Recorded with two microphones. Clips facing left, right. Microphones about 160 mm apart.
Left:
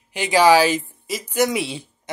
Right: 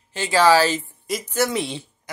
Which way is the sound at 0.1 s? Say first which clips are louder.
Left 2 dB; 15° left (ahead or behind).